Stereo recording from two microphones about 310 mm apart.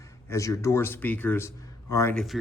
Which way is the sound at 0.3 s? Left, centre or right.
Centre.